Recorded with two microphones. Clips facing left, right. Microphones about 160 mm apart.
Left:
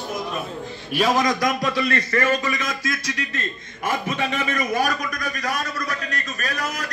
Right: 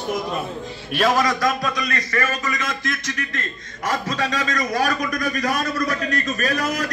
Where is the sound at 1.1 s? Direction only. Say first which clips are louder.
Right 1 dB; 20° left (ahead or behind).